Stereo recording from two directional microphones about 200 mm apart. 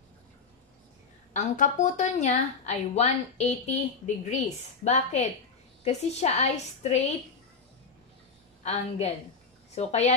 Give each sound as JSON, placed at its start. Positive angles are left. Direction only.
{"t": 1.3, "sound": "speech", "side_deg": 35}
{"t": 8.6, "sound": "speech", "side_deg": 35}